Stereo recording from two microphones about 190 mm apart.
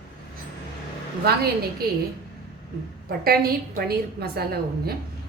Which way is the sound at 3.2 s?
55° right (ahead or behind).